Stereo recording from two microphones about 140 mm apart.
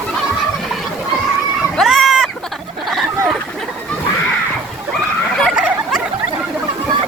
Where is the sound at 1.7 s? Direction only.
Centre (ahead or behind).